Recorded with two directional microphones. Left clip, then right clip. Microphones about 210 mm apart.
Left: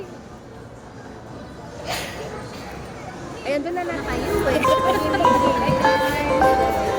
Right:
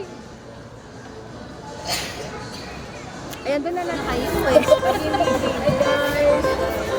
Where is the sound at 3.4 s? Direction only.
15° right (ahead or behind).